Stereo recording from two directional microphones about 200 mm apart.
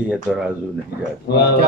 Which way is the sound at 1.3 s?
55° left (ahead or behind).